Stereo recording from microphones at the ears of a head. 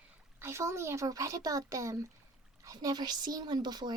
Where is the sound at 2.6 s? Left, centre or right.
Right.